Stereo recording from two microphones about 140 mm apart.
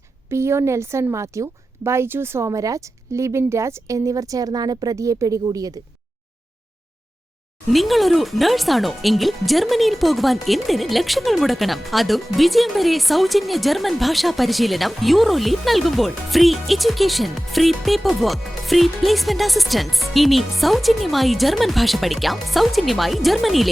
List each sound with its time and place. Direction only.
0.3 s a woman's voice: 20° right (ahead or behind)
7.7 s speech: centre (ahead or behind)